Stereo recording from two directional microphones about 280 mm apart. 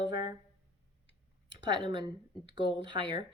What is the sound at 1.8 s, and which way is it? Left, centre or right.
Speech, centre.